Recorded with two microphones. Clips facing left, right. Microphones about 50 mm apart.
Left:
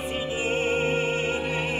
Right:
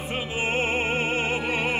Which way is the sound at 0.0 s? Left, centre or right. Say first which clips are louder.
Even; right.